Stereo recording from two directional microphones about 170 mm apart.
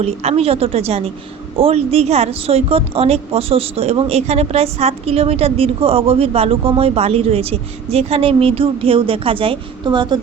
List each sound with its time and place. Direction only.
0.0 s a woman's voice: 40° right (ahead or behind)